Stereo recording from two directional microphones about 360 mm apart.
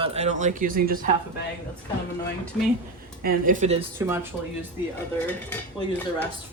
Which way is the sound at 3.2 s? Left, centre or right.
Right.